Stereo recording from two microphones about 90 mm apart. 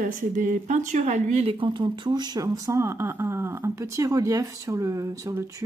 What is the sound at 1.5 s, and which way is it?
Speech, 70° right (ahead or behind).